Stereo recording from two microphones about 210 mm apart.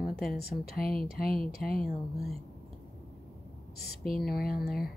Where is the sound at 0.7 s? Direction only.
45° left (ahead or behind).